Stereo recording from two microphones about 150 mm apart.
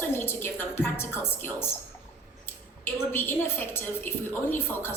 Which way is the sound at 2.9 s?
15° left (ahead or behind).